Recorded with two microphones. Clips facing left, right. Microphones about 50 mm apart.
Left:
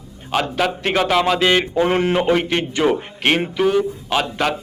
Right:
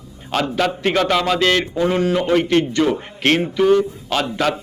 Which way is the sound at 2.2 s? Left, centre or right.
Centre.